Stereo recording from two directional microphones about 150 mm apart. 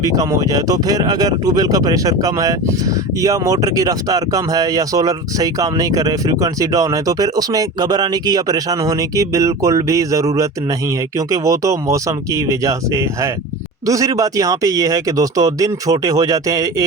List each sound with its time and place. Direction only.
0.0 s speech: 25° right (ahead or behind)
11.3 s speech: 20° right (ahead or behind)